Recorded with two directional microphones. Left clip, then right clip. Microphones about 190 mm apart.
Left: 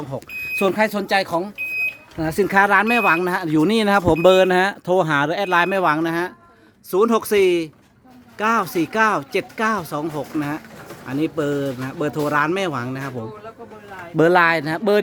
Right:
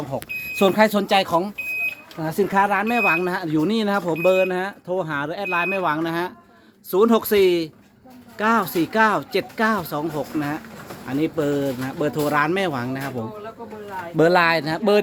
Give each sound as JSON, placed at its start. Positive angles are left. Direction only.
{"t": 0.1, "sound": "speech", "side_deg": 0}
{"t": 2.1, "sound": "speech", "side_deg": 40}
{"t": 14.2, "sound": "speech", "side_deg": 30}